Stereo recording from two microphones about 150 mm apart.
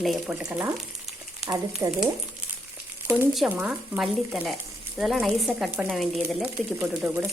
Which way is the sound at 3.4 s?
10° right (ahead or behind).